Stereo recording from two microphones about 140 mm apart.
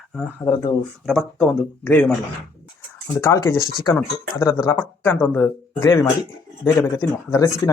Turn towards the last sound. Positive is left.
turn(degrees=20)  # may be behind; listen again after turning